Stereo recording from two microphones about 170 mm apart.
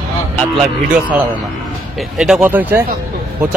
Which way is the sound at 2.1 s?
5° right (ahead or behind).